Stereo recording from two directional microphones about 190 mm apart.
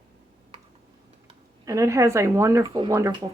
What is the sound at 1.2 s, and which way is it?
Speech, 15° right (ahead or behind).